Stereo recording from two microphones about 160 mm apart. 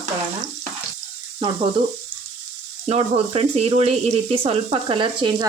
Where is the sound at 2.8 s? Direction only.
40° right (ahead or behind).